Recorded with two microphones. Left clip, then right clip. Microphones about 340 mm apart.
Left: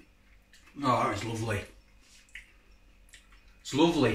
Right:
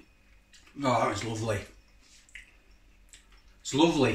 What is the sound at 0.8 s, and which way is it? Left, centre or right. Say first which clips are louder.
Speech: right 1 dB; centre.